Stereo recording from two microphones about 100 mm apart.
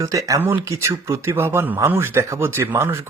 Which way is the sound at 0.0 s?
35° right (ahead or behind).